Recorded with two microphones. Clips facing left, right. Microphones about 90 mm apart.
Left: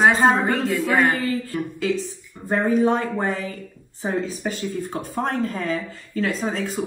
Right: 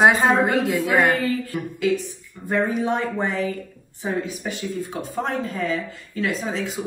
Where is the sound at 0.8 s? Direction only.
5° right (ahead or behind).